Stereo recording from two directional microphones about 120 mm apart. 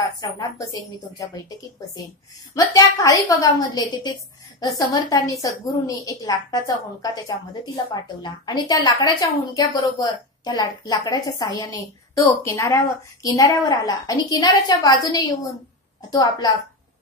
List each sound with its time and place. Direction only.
0.2 s a woman's voice: 30° left (ahead or behind)
2.5 s a woman's voice: 25° left (ahead or behind)